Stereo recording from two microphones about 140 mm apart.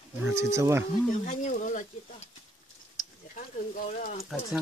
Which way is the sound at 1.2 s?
60° left (ahead or behind).